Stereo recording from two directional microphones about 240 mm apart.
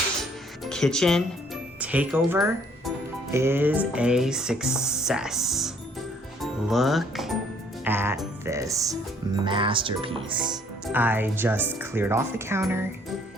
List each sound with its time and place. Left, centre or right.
0.2 s music: centre
1.8 s speech: centre
10.8 s speech: centre